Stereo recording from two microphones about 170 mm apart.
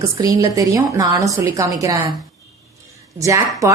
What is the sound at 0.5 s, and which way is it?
A woman's voice, 20° right (ahead or behind).